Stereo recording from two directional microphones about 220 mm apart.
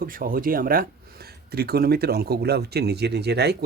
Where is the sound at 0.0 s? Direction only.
40° right (ahead or behind).